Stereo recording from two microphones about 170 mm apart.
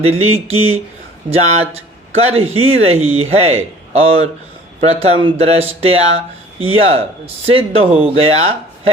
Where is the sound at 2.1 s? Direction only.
35° right (ahead or behind).